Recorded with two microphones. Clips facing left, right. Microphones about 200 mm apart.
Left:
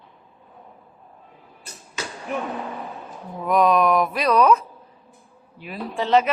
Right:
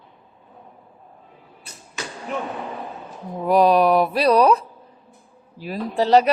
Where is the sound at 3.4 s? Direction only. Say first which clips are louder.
Right 3 dB; 35° right (ahead or behind).